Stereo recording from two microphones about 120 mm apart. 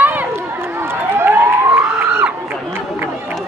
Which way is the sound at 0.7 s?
20° right (ahead or behind).